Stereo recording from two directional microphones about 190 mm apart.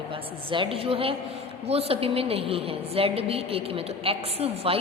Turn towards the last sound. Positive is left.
turn(degrees=-30)  # may be behind; listen again after turning